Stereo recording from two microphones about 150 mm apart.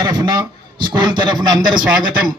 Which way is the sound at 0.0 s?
25° right (ahead or behind).